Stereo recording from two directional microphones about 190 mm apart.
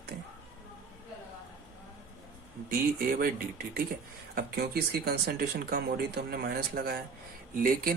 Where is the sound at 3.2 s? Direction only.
50° right (ahead or behind).